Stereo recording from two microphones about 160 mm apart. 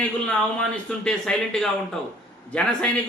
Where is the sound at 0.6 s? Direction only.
5° left (ahead or behind).